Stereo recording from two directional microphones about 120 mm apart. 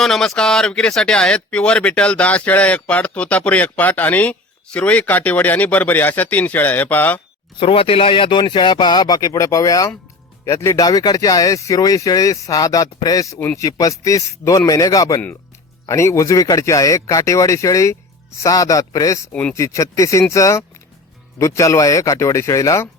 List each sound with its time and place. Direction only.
0.0 s speech: 5° left (ahead or behind)
7.6 s a man's voice: 50° left (ahead or behind); by 19.2 s 30° left (ahead or behind)
19.3 s speech: 10° left (ahead or behind)
19.5 s a man's voice: 25° left (ahead or behind)